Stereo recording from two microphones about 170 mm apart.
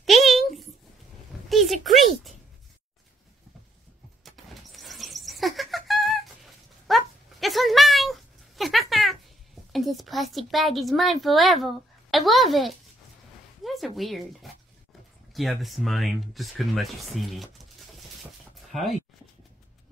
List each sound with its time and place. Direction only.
0.0 s a sound: centre (ahead or behind)
1.5 s speech: centre (ahead or behind)
4.4 s vehicle: centre (ahead or behind)
4.7 s a sound: centre (ahead or behind)
9.7 s speech: centre (ahead or behind)
18.7 s speech: centre (ahead or behind)